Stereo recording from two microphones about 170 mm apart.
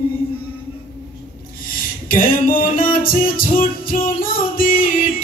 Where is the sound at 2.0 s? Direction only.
55° left (ahead or behind).